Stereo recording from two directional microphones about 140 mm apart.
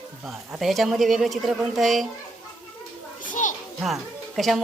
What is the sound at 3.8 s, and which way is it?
Speech, centre (ahead or behind).